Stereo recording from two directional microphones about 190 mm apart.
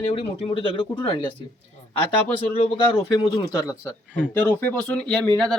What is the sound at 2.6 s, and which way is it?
Speech, 25° left (ahead or behind).